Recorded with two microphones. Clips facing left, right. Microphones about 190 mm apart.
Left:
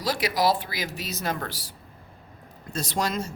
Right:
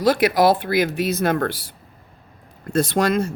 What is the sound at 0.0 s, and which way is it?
Speech, 55° right (ahead or behind).